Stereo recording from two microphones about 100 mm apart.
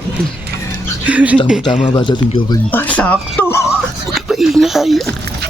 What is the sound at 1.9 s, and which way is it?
Speech, 45° left (ahead or behind).